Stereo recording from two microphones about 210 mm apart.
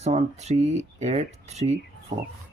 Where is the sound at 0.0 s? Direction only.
30° right (ahead or behind).